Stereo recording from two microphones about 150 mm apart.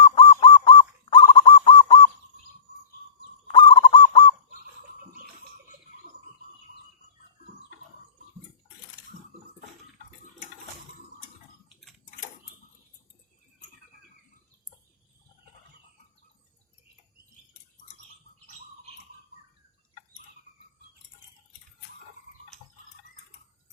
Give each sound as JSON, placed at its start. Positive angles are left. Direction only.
{"t": 0.0, "sound": "bird", "side_deg": 35}
{"t": 3.4, "sound": "goose", "side_deg": 35}